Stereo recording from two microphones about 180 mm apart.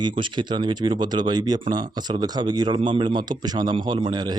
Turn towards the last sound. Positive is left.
turn(degrees=-25)  # may be behind; listen again after turning